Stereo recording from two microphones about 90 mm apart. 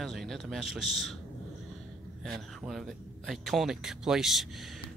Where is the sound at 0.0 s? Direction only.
Centre (ahead or behind).